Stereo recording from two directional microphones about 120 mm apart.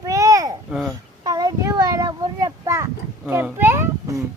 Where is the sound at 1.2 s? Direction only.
30° right (ahead or behind).